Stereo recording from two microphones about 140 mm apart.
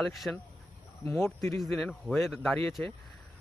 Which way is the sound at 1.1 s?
20° left (ahead or behind).